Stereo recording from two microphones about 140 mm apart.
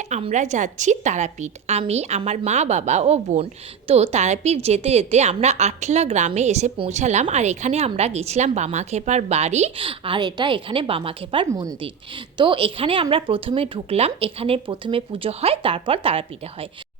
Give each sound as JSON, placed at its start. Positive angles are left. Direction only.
{"t": 0.0, "sound": "a woman's voice", "side_deg": -50}
{"t": 9.8, "sound": "a woman's voice", "side_deg": -40}
{"t": 11.5, "sound": "a woman's voice", "side_deg": -25}